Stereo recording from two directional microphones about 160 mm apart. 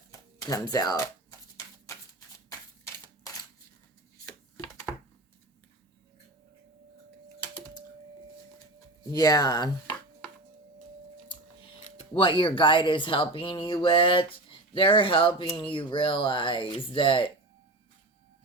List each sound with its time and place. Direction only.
0.1 s speech: 25° left (ahead or behind)
1.9 s shuffling cards: 20° left (ahead or behind)
9.0 s speech: 25° left (ahead or behind)
11.9 s speech: 35° left (ahead or behind)